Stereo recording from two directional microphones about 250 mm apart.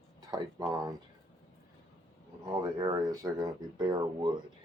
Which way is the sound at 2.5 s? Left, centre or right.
Centre.